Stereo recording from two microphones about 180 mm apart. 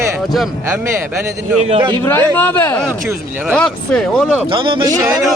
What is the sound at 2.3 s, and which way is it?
Speech, 10° left (ahead or behind).